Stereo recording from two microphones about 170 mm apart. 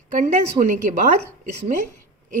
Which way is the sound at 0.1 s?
45° right (ahead or behind).